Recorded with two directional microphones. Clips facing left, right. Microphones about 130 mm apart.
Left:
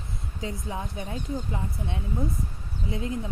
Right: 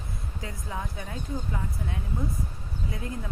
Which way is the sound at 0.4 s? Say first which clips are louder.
Left 3 dB; 20° left (ahead or behind).